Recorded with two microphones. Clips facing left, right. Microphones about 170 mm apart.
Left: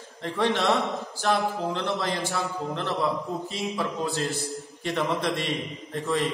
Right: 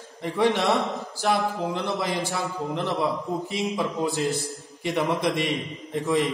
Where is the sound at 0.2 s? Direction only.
15° right (ahead or behind).